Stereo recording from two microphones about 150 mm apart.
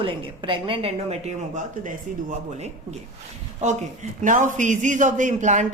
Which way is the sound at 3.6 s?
55° right (ahead or behind).